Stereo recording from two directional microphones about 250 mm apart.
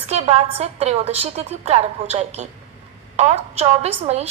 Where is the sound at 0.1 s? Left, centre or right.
Right.